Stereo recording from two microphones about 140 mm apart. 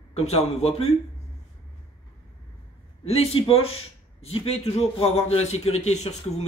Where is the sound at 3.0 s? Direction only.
45° left (ahead or behind).